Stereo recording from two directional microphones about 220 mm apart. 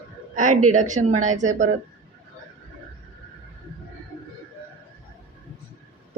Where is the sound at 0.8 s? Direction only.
35° right (ahead or behind).